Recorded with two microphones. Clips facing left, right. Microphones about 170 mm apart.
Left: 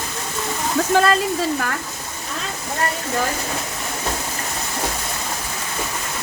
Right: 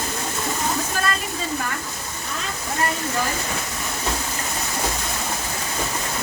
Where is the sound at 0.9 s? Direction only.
90° left.